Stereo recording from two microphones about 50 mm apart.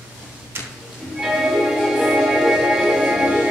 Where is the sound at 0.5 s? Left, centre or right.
Right.